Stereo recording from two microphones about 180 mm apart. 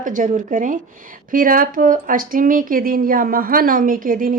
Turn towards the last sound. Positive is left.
turn(degrees=-50)  # may be behind; listen again after turning